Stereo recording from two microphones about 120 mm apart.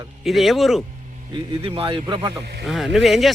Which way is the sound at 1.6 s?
50° right (ahead or behind).